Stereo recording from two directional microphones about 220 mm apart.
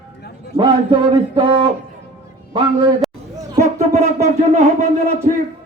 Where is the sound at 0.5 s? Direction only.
25° right (ahead or behind).